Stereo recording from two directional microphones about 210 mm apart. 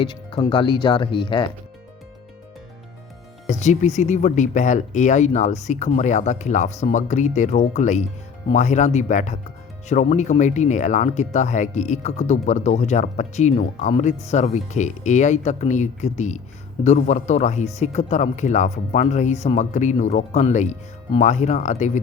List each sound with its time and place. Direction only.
0.0 s speech: 25° left (ahead or behind)
3.4 s speech: 35° left (ahead or behind)